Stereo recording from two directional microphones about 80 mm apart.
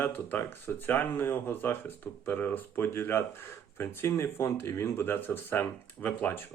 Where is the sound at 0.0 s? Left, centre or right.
Left.